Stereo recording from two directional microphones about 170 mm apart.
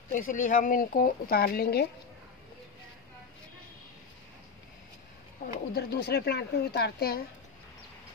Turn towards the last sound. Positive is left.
turn(degrees=70)  # may be behind; listen again after turning